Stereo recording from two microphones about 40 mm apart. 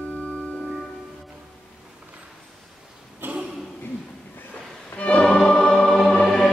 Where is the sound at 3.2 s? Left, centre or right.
Right.